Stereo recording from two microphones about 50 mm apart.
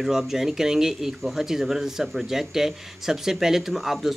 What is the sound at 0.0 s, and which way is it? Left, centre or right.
Speech, centre.